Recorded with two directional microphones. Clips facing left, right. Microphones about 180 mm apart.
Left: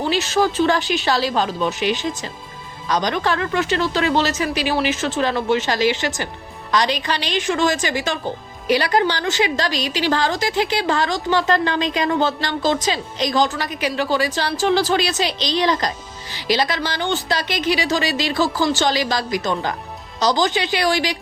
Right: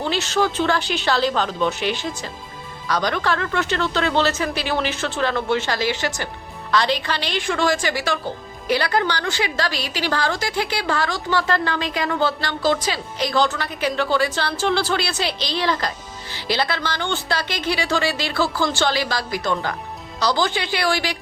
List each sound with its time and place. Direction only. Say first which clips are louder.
0.1 s a woman's voice: left 2 dB; 15° left (ahead or behind)